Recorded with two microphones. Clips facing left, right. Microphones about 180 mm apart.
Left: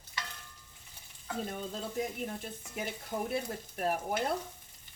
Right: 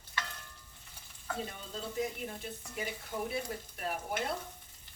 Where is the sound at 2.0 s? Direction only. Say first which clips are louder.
Even; 45° left (ahead or behind).